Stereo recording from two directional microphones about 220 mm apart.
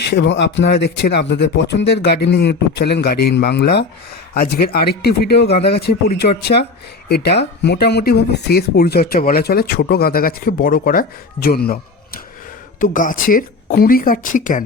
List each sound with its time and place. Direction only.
0.1 s speech: 55° left (ahead or behind); by 14.6 s 35° left (ahead or behind)